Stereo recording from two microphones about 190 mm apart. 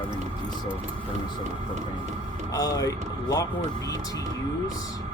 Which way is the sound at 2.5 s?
20° left (ahead or behind).